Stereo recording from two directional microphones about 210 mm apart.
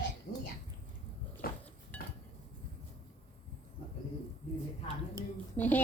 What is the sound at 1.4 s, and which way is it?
Dishes, 45° left (ahead or behind).